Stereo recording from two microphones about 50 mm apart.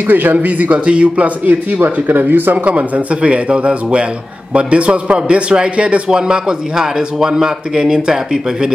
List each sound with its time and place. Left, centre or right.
0.1 s speech: right
2.6 s a man's voice: right